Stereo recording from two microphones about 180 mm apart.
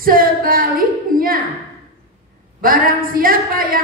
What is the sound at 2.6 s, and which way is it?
A woman's voice, 50° right (ahead or behind).